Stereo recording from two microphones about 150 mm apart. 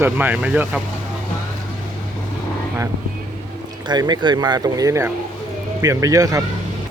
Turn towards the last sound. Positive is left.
turn(degrees=-20)  # may be behind; listen again after turning